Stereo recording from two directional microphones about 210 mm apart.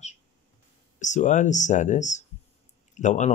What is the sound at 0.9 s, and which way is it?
Speech, 35° left (ahead or behind).